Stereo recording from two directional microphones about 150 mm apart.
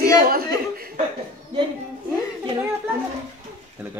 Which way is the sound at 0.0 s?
80° right.